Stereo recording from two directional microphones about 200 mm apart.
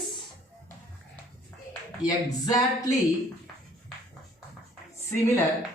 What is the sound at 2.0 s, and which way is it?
Speech, 15° left (ahead or behind).